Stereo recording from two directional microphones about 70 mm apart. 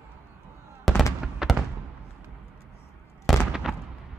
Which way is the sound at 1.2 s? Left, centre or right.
Centre.